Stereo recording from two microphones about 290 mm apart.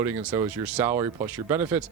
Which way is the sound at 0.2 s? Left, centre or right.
Centre.